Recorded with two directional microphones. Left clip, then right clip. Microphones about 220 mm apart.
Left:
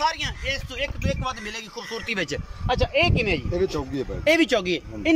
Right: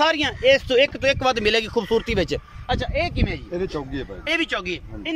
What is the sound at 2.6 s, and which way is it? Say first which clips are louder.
Speech: left 4 dB; 5° left (ahead or behind).